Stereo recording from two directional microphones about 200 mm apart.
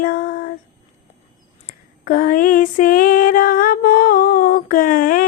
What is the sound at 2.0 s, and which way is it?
Music, 45° left (ahead or behind).